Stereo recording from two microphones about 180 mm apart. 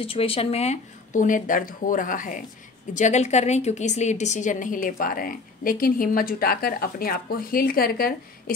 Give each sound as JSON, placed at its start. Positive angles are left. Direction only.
{"t": 0.0, "sound": "a woman's voice", "side_deg": 30}